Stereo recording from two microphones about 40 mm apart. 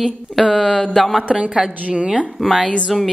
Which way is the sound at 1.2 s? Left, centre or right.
Right.